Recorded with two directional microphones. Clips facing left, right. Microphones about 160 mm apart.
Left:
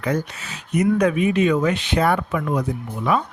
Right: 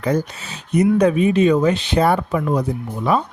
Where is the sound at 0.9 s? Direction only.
30° right (ahead or behind).